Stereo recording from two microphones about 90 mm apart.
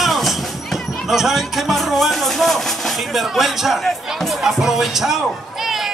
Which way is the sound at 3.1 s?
Centre (ahead or behind).